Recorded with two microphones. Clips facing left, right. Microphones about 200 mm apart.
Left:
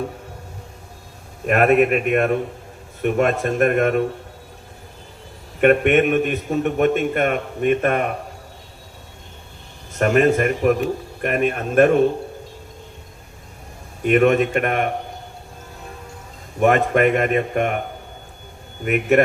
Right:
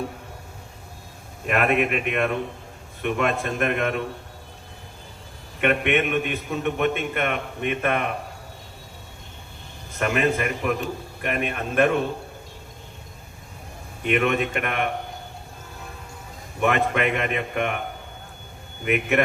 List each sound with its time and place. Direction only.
1.5 s a man's voice: 45° left (ahead or behind)
5.5 s a man's voice: 45° left (ahead or behind)
10.0 s a man's voice: 45° left (ahead or behind)
14.0 s a man's voice: 40° left (ahead or behind)
16.6 s a man's voice: 45° left (ahead or behind)
18.9 s a man's voice: 45° left (ahead or behind)